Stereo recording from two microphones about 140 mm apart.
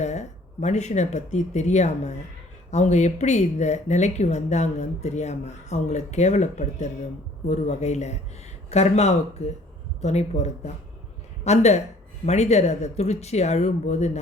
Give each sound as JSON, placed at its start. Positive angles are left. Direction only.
{"t": 0.0, "sound": "speech", "side_deg": 55}